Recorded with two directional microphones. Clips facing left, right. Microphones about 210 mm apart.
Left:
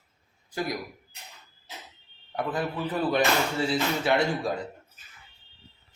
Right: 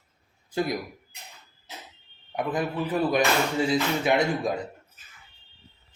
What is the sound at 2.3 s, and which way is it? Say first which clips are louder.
Speech: right 2 dB; 15° right (ahead or behind).